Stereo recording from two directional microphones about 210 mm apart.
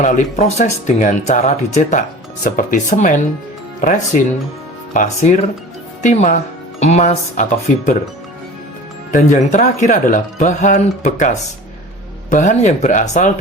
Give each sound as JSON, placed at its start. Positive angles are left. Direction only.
{"t": 0.0, "sound": "speech", "side_deg": 35}
{"t": 9.1, "sound": "speech", "side_deg": 35}
{"t": 12.3, "sound": "speech", "side_deg": 35}